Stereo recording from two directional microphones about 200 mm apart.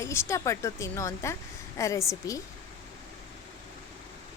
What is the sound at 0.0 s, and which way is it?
Speech, 15° left (ahead or behind).